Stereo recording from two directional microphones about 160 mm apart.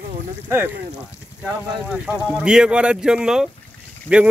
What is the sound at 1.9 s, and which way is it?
Speech, 10° right (ahead or behind).